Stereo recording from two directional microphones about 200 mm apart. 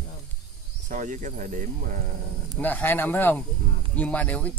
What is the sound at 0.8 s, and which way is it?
Speech, 40° right (ahead or behind).